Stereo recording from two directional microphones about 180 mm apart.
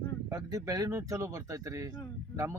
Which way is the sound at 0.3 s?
20° right (ahead or behind).